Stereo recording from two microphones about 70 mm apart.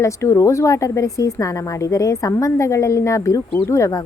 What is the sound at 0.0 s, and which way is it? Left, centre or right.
A woman's voice, left.